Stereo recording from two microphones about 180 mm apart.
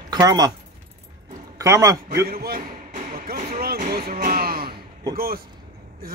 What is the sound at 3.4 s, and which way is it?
Speech, 40° right (ahead or behind).